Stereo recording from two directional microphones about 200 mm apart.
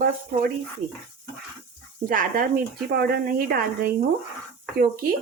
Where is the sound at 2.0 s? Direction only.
45° right (ahead or behind).